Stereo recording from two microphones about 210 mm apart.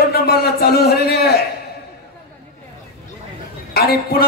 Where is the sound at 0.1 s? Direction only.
45° left (ahead or behind).